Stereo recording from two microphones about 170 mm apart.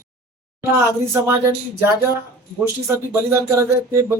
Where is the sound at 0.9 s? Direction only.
15° right (ahead or behind).